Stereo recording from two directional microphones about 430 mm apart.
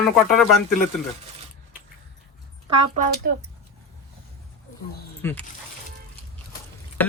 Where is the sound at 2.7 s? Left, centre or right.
Centre.